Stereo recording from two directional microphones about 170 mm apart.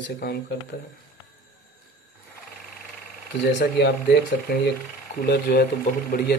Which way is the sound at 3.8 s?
80° left.